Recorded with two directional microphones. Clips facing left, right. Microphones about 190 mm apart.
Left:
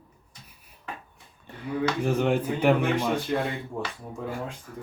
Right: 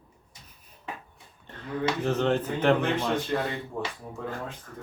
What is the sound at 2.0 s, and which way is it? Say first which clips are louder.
Speech: left 1 dB; 10° left (ahead or behind).